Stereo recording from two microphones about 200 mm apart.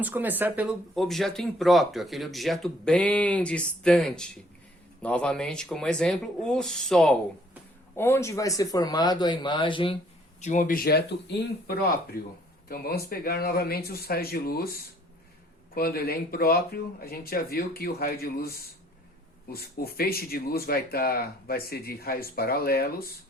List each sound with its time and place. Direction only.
0.0 s speech: 10° right (ahead or behind); by 10.0 s 25° left (ahead or behind)
10.4 s speech: 40° left (ahead or behind)
19.5 s speech: 50° left (ahead or behind)